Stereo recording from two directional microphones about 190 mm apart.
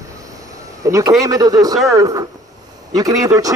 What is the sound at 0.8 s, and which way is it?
A man's voice, 15° right (ahead or behind).